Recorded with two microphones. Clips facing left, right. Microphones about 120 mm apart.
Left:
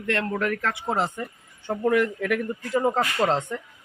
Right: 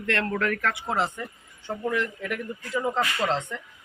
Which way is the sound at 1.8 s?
60° left (ahead or behind).